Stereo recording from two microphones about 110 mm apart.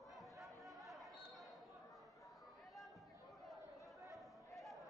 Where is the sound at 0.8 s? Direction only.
Centre (ahead or behind).